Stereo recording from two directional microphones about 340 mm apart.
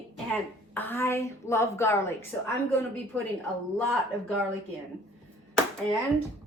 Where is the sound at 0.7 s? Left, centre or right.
Centre.